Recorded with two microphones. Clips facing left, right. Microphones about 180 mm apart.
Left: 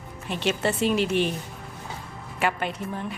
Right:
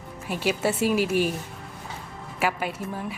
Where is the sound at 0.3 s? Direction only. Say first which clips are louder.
Even; 5° right (ahead or behind).